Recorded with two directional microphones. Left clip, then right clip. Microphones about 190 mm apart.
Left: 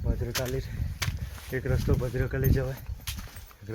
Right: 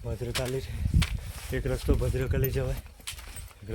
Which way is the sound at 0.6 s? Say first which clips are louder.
Right 1 dB; 5° right (ahead or behind).